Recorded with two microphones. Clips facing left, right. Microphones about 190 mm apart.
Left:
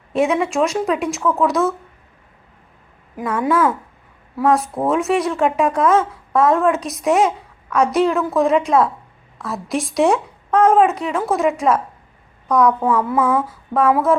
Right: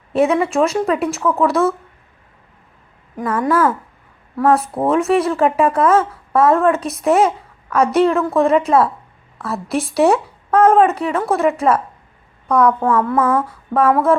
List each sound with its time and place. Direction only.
0.1 s speech: centre (ahead or behind)
3.2 s speech: 5° left (ahead or behind)